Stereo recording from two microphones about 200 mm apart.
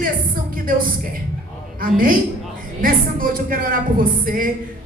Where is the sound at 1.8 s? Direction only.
45° right (ahead or behind).